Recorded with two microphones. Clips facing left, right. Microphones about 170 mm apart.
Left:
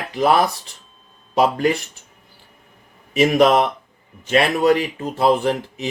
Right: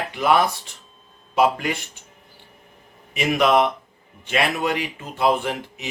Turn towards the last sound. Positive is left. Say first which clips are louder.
# left 6 dB
turn(degrees=35)  # may be behind; listen again after turning